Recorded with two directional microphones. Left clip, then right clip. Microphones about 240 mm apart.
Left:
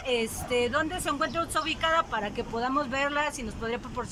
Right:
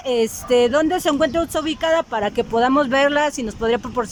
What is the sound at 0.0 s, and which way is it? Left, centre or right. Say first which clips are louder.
Speech: right 9 dB; right.